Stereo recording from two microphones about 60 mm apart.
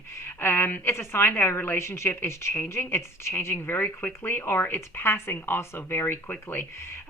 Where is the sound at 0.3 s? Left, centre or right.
Left.